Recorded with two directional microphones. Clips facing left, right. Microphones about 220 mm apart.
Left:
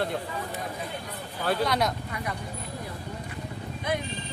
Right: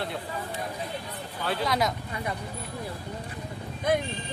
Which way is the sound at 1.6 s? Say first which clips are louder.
Right 1 dB; centre (ahead or behind).